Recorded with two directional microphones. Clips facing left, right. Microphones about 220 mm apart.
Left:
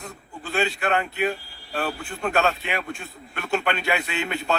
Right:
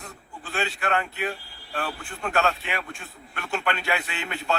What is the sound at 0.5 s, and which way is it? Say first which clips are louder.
Speech: left 3 dB; 20° left (ahead or behind).